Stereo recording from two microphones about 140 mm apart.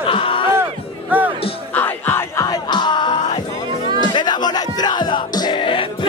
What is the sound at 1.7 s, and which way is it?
Music, 15° left (ahead or behind).